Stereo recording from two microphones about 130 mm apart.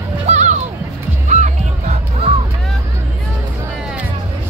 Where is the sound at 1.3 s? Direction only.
65° right (ahead or behind).